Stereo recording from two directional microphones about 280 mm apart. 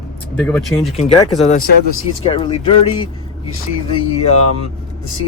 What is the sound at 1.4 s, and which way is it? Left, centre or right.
Speech, left.